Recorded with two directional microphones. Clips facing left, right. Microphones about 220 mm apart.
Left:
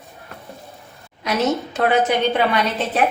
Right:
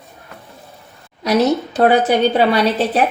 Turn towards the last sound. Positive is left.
turn(degrees=-35)  # may be behind; listen again after turning